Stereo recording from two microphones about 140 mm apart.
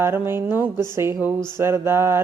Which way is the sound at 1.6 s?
20° right (ahead or behind).